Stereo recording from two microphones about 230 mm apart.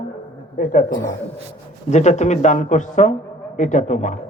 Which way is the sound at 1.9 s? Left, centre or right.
Left.